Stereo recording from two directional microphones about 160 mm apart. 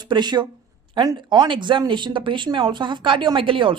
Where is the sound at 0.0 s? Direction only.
25° right (ahead or behind).